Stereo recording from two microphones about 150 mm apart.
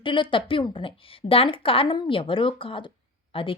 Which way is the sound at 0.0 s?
35° left (ahead or behind).